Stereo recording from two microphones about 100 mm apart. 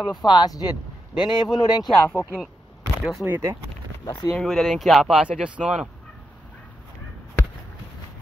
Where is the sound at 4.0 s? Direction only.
50° left (ahead or behind).